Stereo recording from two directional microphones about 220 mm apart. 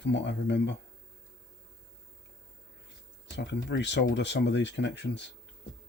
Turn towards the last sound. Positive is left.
turn(degrees=50)  # may be behind; listen again after turning